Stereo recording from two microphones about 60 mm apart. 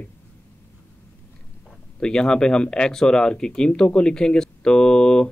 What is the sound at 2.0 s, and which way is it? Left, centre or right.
Speech, centre.